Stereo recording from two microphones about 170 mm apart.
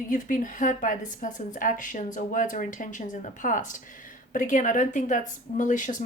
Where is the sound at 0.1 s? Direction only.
50° left (ahead or behind).